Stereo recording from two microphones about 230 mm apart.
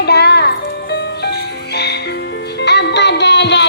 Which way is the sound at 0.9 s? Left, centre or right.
Left.